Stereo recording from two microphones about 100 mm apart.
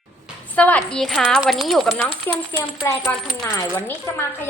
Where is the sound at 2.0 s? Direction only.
25° left (ahead or behind).